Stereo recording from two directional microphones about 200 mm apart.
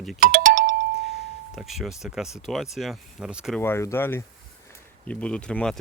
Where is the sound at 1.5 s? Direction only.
Centre (ahead or behind).